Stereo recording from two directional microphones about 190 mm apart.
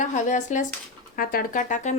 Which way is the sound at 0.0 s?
40° left (ahead or behind).